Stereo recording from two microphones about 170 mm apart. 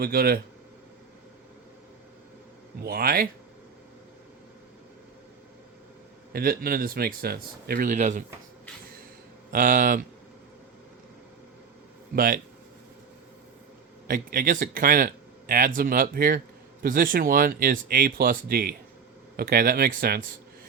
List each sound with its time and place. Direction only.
0.0 s speech: 65° right (ahead or behind)
2.8 s speech: 60° right (ahead or behind)
6.3 s speech: 60° right (ahead or behind)
9.5 s speech: 55° right (ahead or behind)
12.1 s speech: 55° right (ahead or behind)
14.1 s speech: 55° right (ahead or behind)